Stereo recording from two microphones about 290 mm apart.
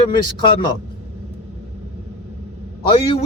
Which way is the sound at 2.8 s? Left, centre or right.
Centre.